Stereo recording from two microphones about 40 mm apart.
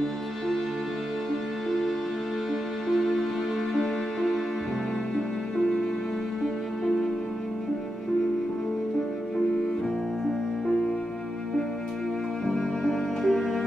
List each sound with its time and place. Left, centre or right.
2.9 s music: centre
10.2 s music: centre
12.4 s music: centre
13.2 s music: centre